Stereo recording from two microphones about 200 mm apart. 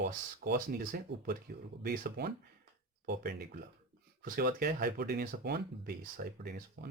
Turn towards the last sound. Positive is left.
turn(degrees=-50)  # may be behind; listen again after turning